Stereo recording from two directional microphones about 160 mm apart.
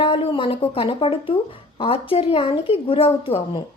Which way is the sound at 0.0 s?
35° left (ahead or behind).